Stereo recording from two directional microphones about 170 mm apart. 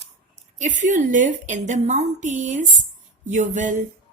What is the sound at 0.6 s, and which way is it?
A woman's voice, 50° right (ahead or behind).